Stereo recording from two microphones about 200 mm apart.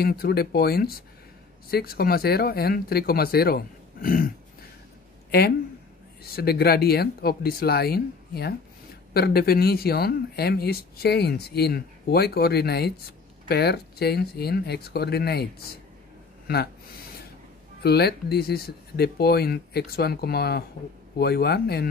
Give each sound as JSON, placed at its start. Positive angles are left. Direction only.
{"t": 0.0, "sound": "speech", "side_deg": 50}
{"t": 6.2, "sound": "speech", "side_deg": 50}
{"t": 17.8, "sound": "speech", "side_deg": 55}